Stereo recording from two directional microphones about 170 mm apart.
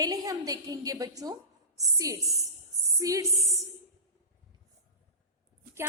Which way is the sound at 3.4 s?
Centre (ahead or behind).